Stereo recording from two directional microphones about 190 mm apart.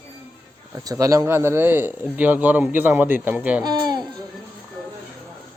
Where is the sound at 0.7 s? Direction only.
20° right (ahead or behind).